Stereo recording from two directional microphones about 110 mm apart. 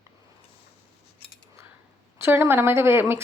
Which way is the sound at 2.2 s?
20° right (ahead or behind).